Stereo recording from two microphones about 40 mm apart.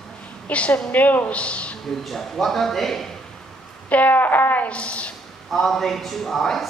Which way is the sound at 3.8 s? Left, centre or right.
Left.